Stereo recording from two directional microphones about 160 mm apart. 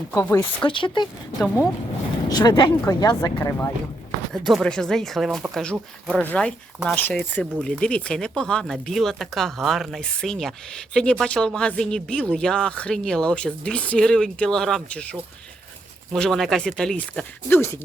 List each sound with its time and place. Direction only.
0.2 s speech: 15° left (ahead or behind)
0.6 s speech: 30° left (ahead or behind)
1.4 s speech: 5° right (ahead or behind)
2.3 s speech: 25° left (ahead or behind)
4.3 s speech: centre (ahead or behind)
16.1 s speech: 5° left (ahead or behind)